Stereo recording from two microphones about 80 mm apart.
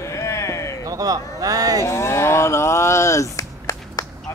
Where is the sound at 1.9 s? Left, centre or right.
Left.